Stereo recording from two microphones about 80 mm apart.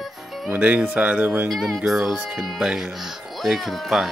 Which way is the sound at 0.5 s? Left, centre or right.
Right.